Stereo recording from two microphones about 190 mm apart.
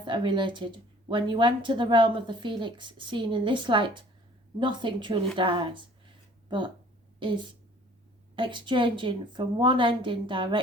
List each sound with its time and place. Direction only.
0.0 s a woman's voice: 25° right (ahead or behind)
7.2 s a woman's voice: 25° right (ahead or behind)